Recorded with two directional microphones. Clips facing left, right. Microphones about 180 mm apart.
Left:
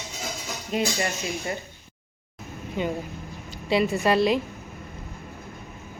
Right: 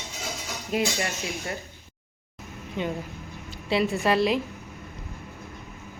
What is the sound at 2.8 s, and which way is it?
A woman's voice, centre (ahead or behind).